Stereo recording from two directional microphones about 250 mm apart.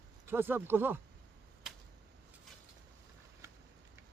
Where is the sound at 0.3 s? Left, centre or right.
Centre.